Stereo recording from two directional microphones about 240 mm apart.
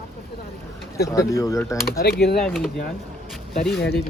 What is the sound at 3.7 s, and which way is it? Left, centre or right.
Speech, left.